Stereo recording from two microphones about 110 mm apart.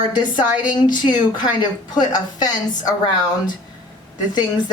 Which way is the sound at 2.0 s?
40° left (ahead or behind).